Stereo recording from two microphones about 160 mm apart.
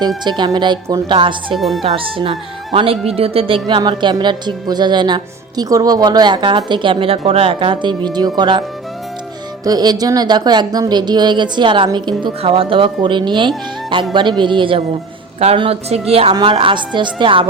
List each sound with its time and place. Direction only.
0.3 s a woman's voice: 25° right (ahead or behind)
1.5 s speech: centre (ahead or behind)
1.8 s a woman's voice: 35° right (ahead or behind)
9.6 s a woman's voice: 25° right (ahead or behind)